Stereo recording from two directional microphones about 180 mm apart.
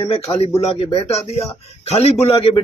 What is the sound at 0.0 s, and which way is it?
Speech, 30° left (ahead or behind).